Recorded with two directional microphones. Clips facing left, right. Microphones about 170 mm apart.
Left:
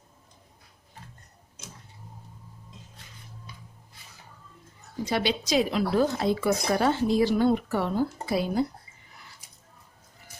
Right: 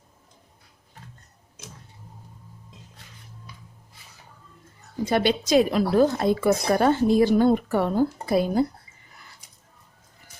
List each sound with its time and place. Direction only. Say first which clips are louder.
5.0 s speech: right 5 dB; 50° right (ahead or behind)